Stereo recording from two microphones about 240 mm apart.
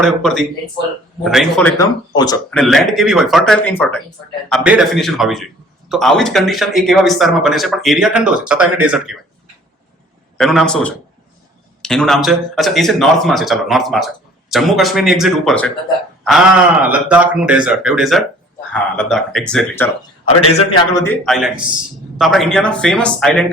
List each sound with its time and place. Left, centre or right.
0.0 s speech: centre
1.8 s speech: centre
2.5 s speech: centre
10.3 s speech: centre
20.5 s a man's voice: left
20.9 s speech: centre
21.2 s speech: centre